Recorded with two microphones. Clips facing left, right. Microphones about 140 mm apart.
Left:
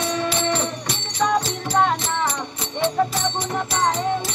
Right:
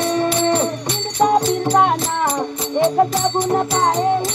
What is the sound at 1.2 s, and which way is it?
Music, 50° right (ahead or behind).